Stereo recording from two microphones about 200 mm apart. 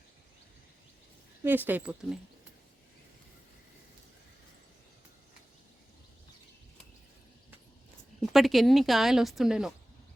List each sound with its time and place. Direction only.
1.5 s speech: 10° right (ahead or behind)
8.2 s speech: centre (ahead or behind)